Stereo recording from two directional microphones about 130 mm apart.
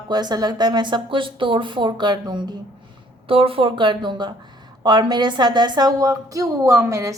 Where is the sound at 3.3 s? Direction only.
45° right (ahead or behind); by 7.1 s 25° right (ahead or behind).